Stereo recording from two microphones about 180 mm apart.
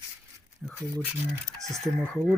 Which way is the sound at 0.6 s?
5° right (ahead or behind).